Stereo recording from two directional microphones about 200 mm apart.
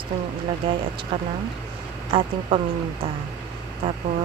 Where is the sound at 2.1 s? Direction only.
30° right (ahead or behind).